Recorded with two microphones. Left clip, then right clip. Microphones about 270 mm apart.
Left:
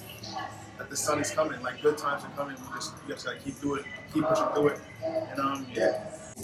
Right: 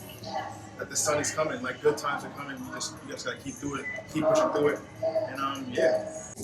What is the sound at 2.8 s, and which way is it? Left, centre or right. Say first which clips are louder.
Speech: right 1 dB; centre.